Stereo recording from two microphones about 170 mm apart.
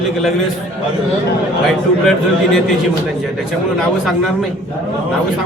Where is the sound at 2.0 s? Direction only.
Centre (ahead or behind).